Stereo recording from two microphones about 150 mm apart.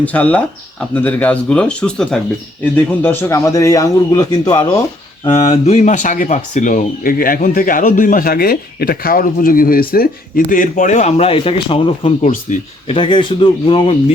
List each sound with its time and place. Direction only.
0.0 s speech: 10° left (ahead or behind); by 4.8 s 25° left (ahead or behind)
5.2 s speech: 40° left (ahead or behind)
12.2 s speech: 55° left (ahead or behind)
12.9 s a man's voice: 35° left (ahead or behind)